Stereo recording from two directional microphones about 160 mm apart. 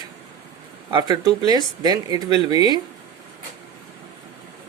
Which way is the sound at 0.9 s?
25° right (ahead or behind).